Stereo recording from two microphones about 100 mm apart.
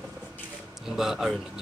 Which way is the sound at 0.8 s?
5° right (ahead or behind).